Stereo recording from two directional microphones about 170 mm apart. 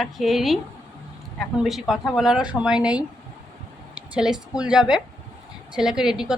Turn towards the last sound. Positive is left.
turn(degrees=-5)  # may be behind; listen again after turning